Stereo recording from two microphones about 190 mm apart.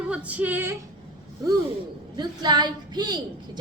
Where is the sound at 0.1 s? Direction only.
5° right (ahead or behind).